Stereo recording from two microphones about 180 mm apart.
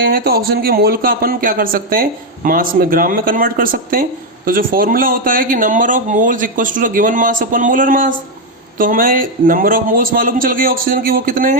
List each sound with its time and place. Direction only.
0.0 s speech: 55° right (ahead or behind)